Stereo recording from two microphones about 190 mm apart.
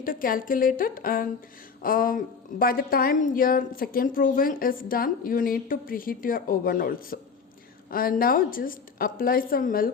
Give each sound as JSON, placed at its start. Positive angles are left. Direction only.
{"t": 0.0, "sound": "a woman's voice", "side_deg": 45}